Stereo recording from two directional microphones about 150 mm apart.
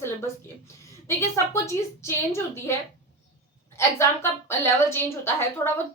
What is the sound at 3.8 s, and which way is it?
A woman's voice, 20° left (ahead or behind).